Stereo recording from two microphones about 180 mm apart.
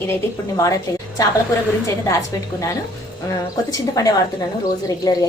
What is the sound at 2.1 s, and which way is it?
Speech, 15° left (ahead or behind).